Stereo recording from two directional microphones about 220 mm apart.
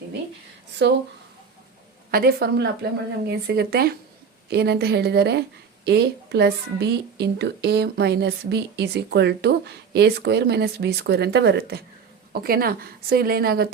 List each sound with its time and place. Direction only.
0.8 s speech: 50° right (ahead or behind)
2.0 s speech: 45° right (ahead or behind)